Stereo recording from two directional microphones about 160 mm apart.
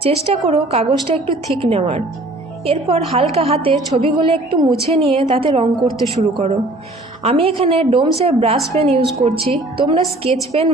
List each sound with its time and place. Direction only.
0.0 s a woman's voice: 40° right (ahead or behind)